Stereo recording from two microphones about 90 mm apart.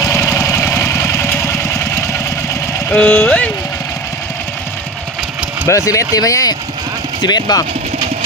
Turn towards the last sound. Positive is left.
turn(degrees=50)  # may be behind; listen again after turning